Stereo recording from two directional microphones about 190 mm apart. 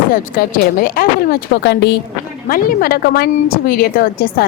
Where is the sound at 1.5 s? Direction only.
60° left (ahead or behind).